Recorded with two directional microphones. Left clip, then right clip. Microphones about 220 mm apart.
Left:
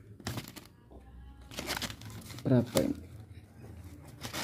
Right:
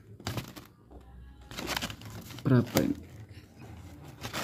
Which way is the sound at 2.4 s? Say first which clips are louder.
Right 1 dB; 20° right (ahead or behind).